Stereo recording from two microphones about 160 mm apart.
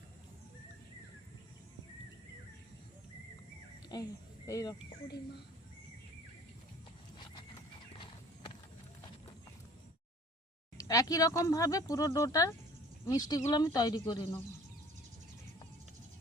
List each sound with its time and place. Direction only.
4.4 s speech: 20° left (ahead or behind)
7.9 s horse: 30° left (ahead or behind)
10.8 s speech: 20° left (ahead or behind)